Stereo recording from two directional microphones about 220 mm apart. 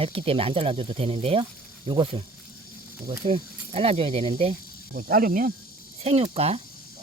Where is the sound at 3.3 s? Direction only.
25° right (ahead or behind).